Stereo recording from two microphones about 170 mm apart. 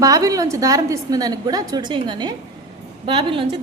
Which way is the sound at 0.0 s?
20° right (ahead or behind).